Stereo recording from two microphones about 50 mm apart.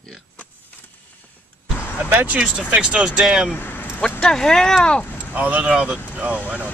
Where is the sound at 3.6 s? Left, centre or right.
Left.